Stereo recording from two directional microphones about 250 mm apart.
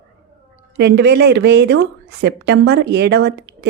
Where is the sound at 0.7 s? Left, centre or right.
Right.